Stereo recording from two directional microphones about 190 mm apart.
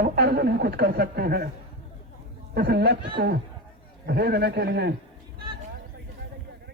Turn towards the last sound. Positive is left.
turn(degrees=-60)  # may be behind; listen again after turning